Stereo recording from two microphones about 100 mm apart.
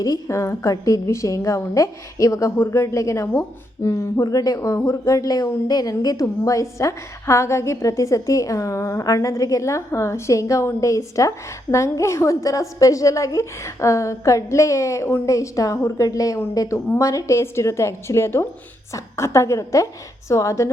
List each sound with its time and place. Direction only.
0.0 s a woman's voice: 35° left (ahead or behind)